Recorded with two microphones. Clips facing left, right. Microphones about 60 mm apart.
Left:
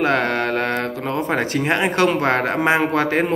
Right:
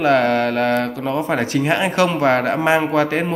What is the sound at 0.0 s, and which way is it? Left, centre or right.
Speech, left.